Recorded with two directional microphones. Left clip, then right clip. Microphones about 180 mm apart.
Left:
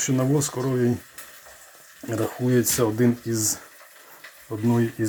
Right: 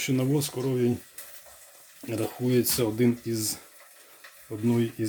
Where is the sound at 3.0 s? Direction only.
35° right (ahead or behind).